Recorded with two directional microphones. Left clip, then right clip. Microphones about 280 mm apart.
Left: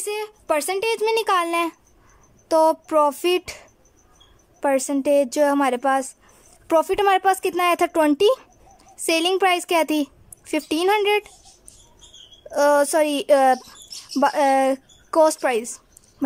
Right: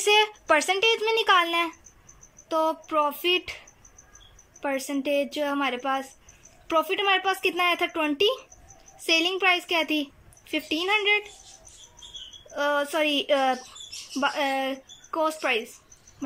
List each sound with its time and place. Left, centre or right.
0.0 s a woman's voice: centre
4.6 s a woman's voice: centre
12.5 s speech: centre